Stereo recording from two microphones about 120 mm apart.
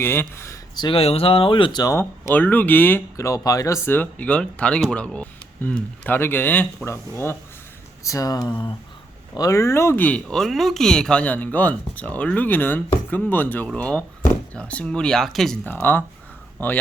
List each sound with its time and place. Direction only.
0.0 s speech: 20° left (ahead or behind)
0.8 s speech: 50° left (ahead or behind)
2.0 s speech: 20° left (ahead or behind); by 8.7 s 40° left (ahead or behind)
9.3 s speech: 30° left (ahead or behind)
10.2 s speech: centre (ahead or behind)
15.6 s speech: 15° left (ahead or behind)